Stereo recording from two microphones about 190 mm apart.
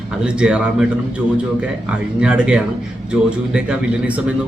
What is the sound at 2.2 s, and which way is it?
Speech, 5° right (ahead or behind).